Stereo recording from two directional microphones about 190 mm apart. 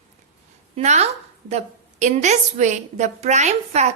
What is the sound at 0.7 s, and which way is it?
A woman's voice, 35° right (ahead or behind).